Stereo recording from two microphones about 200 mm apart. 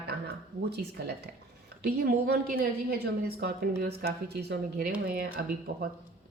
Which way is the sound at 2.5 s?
50° right (ahead or behind).